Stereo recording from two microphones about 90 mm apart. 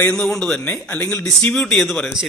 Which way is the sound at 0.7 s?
25° left (ahead or behind).